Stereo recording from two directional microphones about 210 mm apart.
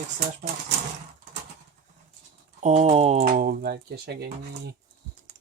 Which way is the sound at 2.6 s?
35° right (ahead or behind).